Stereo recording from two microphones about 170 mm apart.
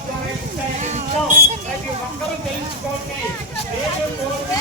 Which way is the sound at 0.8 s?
40° right (ahead or behind).